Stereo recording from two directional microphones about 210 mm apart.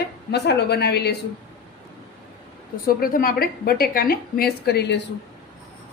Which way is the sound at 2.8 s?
45° left (ahead or behind).